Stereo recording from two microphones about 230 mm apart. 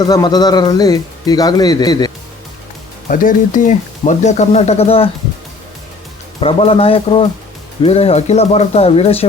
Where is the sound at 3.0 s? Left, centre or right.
Left.